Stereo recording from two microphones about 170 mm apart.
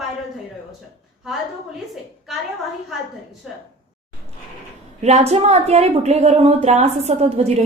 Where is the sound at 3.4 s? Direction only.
Centre (ahead or behind).